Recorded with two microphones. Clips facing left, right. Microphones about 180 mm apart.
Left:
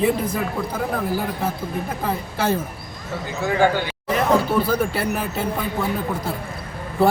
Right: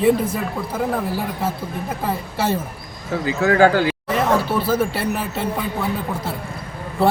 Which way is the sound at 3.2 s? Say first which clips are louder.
Right 4 dB; 75° right (ahead or behind).